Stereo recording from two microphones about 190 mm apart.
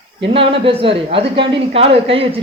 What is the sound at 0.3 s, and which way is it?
A woman's voice, 30° right (ahead or behind).